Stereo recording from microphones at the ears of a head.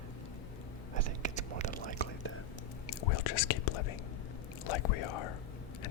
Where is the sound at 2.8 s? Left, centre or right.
Left.